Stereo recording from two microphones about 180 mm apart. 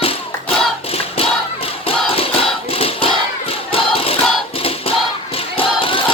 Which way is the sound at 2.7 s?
30° left (ahead or behind).